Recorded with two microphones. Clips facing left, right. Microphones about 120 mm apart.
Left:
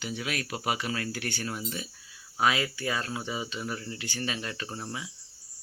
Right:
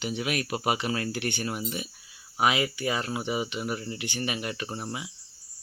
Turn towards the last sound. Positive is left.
turn(degrees=-15)  # may be behind; listen again after turning